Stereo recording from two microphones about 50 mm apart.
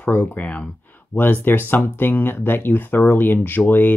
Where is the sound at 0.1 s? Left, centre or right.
Left.